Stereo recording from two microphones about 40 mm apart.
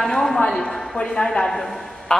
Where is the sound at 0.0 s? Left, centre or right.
Centre.